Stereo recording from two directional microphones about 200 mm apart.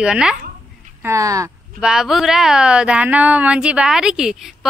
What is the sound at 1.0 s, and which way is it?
Speech, 15° right (ahead or behind).